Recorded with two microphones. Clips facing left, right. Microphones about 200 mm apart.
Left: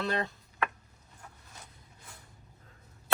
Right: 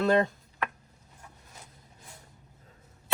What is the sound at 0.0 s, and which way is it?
Speech, 45° right (ahead or behind).